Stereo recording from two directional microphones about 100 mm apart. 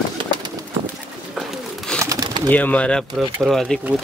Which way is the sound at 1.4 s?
5° left (ahead or behind).